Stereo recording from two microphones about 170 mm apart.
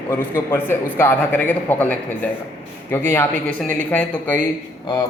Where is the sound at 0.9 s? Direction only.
10° left (ahead or behind).